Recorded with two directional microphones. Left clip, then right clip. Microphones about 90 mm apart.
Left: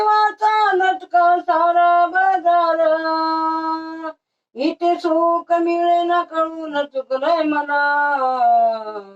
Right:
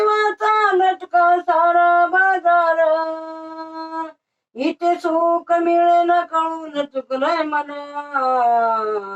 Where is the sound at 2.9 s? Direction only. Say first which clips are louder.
Left 4 dB; 35° right (ahead or behind).